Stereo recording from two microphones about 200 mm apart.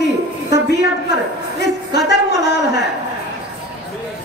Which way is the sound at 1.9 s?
55° left (ahead or behind).